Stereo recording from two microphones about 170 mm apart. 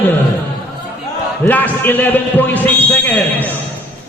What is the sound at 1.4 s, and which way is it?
A man's voice, 10° left (ahead or behind).